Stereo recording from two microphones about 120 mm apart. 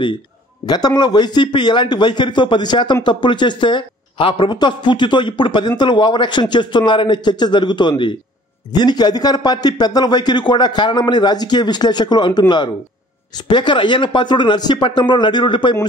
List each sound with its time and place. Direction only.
0.7 s speech: 35° left (ahead or behind)